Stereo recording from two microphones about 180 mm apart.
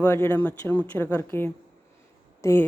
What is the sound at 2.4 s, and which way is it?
Speech, 15° left (ahead or behind).